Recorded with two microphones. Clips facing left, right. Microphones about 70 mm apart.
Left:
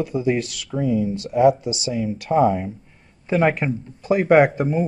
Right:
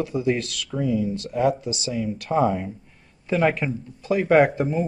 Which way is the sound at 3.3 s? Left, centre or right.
Centre.